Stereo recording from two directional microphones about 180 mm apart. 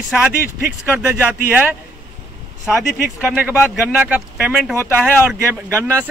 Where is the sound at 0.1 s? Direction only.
10° right (ahead or behind).